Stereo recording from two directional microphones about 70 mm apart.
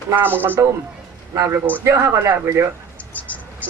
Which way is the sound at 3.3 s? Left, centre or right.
Left.